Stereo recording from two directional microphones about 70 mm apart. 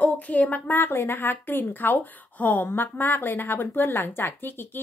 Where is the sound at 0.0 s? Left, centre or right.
Left.